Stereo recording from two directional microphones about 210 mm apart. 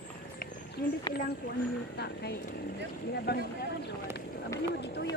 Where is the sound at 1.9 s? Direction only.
50° left (ahead or behind).